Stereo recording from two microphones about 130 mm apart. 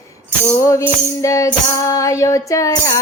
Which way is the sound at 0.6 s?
25° left (ahead or behind).